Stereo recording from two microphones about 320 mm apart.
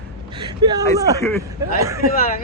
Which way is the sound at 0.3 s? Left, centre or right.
Centre.